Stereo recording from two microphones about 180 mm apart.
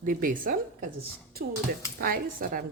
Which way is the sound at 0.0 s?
50° right (ahead or behind).